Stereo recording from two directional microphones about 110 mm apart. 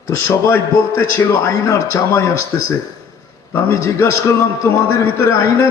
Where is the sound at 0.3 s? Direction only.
20° left (ahead or behind).